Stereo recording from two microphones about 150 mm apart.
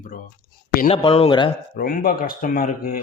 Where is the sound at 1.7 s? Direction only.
70° left (ahead or behind).